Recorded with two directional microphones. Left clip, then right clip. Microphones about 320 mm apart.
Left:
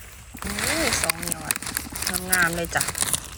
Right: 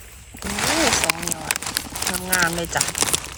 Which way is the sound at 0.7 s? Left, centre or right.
Centre.